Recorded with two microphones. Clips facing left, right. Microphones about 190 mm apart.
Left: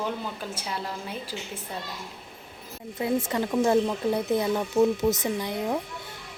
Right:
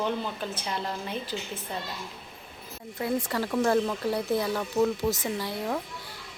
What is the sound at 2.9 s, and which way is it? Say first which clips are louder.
Speech: left 2 dB; 20° left (ahead or behind).